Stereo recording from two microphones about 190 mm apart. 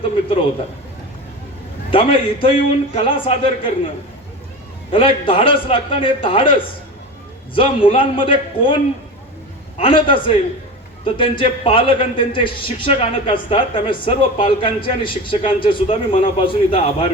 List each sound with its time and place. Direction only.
1.9 s a man's voice: 30° left (ahead or behind)
4.9 s a man's voice: 30° left (ahead or behind)